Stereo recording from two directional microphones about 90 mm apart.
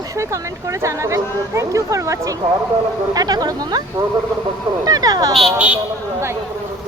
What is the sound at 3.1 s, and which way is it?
Speech, 45° right (ahead or behind).